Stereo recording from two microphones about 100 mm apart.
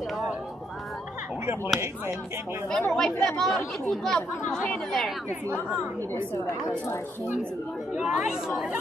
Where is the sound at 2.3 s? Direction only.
25° right (ahead or behind).